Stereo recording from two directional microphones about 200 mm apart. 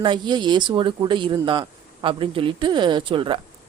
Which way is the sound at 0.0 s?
20° right (ahead or behind).